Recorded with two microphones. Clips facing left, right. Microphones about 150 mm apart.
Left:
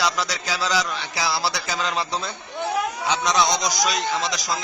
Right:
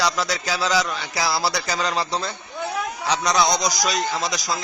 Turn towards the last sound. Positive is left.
turn(degrees=-40)  # may be behind; listen again after turning